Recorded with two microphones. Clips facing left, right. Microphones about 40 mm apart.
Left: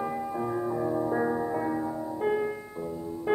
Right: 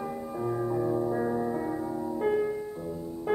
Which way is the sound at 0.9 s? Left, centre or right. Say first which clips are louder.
Left 1 dB; left.